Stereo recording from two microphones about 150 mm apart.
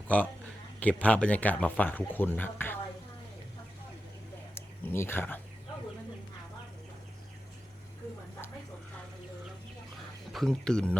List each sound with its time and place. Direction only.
0.1 s speech: 10° left (ahead or behind)
4.5 s speech: 15° left (ahead or behind)
10.3 s speech: 5° left (ahead or behind)